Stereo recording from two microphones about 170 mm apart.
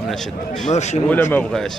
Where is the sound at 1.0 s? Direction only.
10° left (ahead or behind).